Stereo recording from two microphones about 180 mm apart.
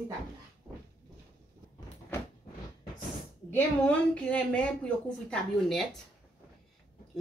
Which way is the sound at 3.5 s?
10° left (ahead or behind).